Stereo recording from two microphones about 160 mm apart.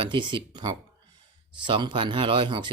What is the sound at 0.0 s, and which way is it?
Speech, 30° right (ahead or behind).